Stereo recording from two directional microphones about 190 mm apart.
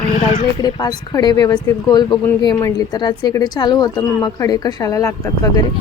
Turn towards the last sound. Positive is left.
turn(degrees=20)  # may be behind; listen again after turning